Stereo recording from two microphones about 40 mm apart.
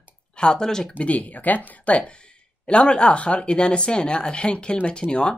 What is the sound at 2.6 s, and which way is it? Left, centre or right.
Speech, left.